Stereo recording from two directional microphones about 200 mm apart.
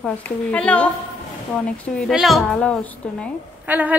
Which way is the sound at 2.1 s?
Centre (ahead or behind).